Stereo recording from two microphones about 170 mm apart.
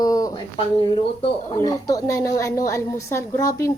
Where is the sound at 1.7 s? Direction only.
20° left (ahead or behind).